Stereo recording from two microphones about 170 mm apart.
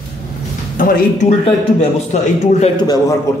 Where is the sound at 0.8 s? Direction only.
55° left (ahead or behind).